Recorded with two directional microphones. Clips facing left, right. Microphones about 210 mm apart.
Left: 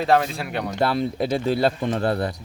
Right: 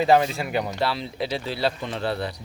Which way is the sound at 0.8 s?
50° left (ahead or behind).